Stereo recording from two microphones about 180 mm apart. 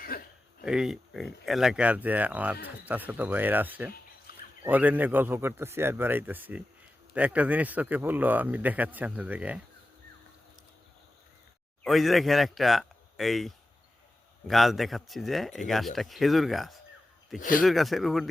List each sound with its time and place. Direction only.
0.1 s throat clearing: 55° left (ahead or behind)
0.6 s a man's voice: 5° right (ahead or behind)
11.8 s speech: centre (ahead or behind)